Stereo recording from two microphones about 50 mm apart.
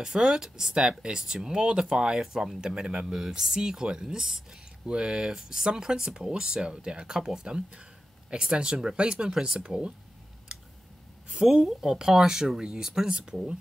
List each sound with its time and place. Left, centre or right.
0.0 s speech: centre
11.4 s speech: centre